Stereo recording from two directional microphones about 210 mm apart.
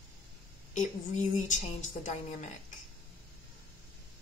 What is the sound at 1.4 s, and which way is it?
A woman's voice, 35° left (ahead or behind).